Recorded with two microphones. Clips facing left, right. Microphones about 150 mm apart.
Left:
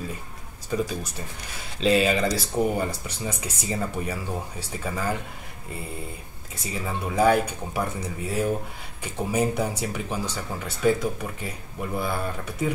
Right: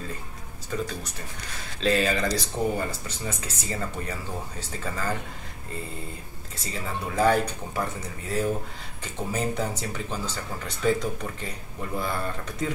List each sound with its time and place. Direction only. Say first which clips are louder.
0.7 s speech: left 4 dB; 15° left (ahead or behind)
6.5 s speech: left 2 dB; 15° left (ahead or behind)
9.0 s speech: left 4 dB; 10° left (ahead or behind)